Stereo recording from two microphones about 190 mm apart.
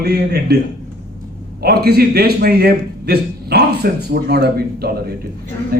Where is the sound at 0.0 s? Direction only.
60° right (ahead or behind).